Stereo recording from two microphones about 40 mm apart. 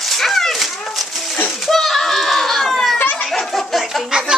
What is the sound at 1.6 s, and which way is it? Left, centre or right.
Children playing, centre.